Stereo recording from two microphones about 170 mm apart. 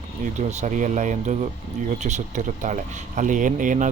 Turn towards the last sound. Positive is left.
turn(degrees=-50)  # may be behind; listen again after turning